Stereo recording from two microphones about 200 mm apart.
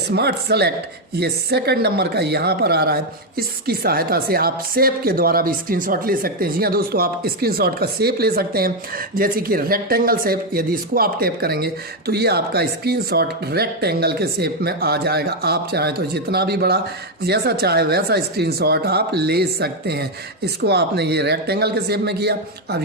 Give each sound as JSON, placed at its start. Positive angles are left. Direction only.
{"t": 0.1, "sound": "speech", "side_deg": -55}